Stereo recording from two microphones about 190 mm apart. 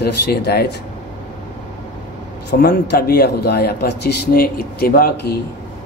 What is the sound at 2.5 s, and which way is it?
Speech, 60° left (ahead or behind).